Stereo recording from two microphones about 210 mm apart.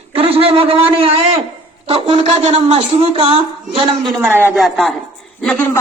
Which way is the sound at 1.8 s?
30° right (ahead or behind).